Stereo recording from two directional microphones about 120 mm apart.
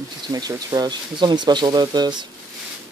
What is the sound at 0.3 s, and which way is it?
Speech, 35° right (ahead or behind).